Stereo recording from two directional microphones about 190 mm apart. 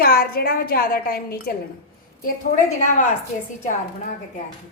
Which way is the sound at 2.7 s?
40° left (ahead or behind).